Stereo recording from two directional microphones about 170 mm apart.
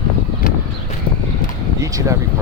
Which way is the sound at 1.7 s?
20° right (ahead or behind).